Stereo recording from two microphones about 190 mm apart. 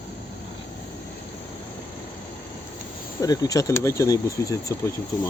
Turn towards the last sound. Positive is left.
turn(degrees=15)  # may be behind; listen again after turning